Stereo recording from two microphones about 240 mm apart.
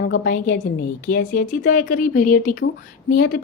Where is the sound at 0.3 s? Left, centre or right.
Left.